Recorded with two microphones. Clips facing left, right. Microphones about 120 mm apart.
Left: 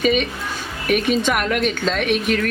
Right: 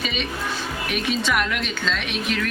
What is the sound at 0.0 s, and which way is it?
A woman's voice, 50° left (ahead or behind).